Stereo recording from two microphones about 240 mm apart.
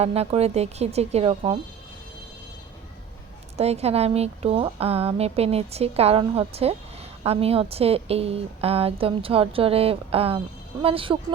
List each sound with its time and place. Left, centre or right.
0.0 s a woman's voice: right
3.6 s a woman's voice: right